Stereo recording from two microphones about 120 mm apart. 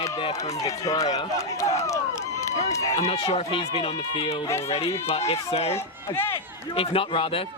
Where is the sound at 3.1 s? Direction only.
50° left (ahead or behind).